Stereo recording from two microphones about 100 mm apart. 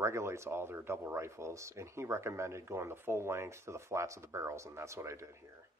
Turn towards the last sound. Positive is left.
turn(degrees=-30)  # may be behind; listen again after turning